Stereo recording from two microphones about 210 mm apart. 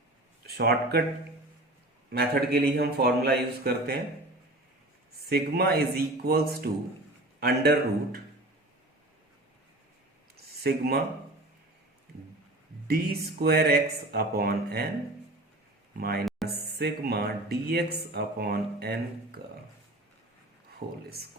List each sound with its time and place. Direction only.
0.4 s speech: 50° right (ahead or behind)
2.0 s speech: 50° right (ahead or behind)
5.3 s speech: 45° right (ahead or behind)
10.3 s a sound: 50° right (ahead or behind)
12.9 s speech: 45° right (ahead or behind)
16.0 s speech: 50° right (ahead or behind)
16.2 s music: centre (ahead or behind)
16.6 s speech: 50° right (ahead or behind)
20.7 s speech: 50° right (ahead or behind)